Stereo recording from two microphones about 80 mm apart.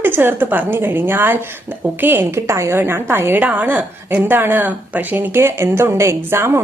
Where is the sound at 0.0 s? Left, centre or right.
Right.